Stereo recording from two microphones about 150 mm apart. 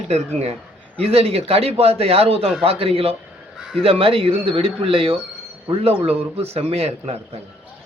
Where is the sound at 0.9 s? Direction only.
40° right (ahead or behind).